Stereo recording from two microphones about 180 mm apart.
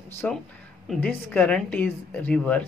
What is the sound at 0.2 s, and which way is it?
A woman's voice, 10° left (ahead or behind).